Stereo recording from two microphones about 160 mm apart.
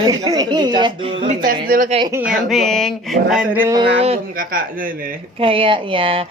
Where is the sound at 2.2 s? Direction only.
Centre (ahead or behind).